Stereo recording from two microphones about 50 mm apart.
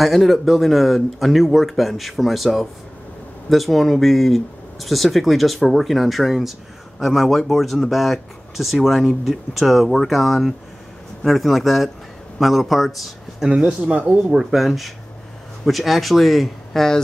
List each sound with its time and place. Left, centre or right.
0.0 s speech: centre
13.8 s speech: right
14.3 s speech: centre